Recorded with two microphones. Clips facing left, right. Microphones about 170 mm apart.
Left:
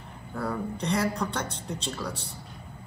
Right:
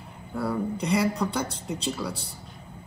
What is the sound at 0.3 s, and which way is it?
Speech, 10° right (ahead or behind).